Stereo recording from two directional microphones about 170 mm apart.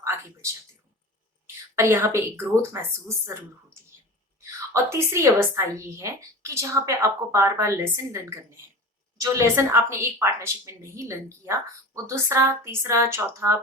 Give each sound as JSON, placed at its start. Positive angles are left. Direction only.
{"t": 0.0, "sound": "speech", "side_deg": -15}
{"t": 1.7, "sound": "a woman's voice", "side_deg": -15}
{"t": 4.7, "sound": "a woman's voice", "side_deg": -15}